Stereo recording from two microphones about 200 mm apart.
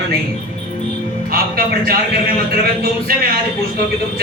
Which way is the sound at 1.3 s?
45° right (ahead or behind).